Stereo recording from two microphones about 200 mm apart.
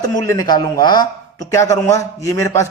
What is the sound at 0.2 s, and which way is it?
A man's voice, 20° left (ahead or behind).